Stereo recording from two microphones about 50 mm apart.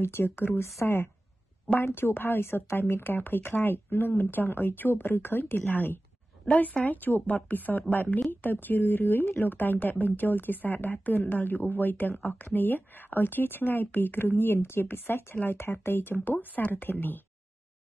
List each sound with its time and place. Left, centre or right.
0.0 s a woman's voice: left
16.3 s speech: left